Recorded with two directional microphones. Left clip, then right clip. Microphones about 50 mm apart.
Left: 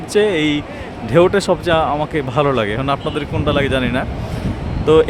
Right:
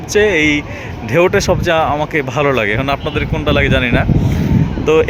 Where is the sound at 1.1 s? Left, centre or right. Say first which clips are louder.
Right 1 dB; centre.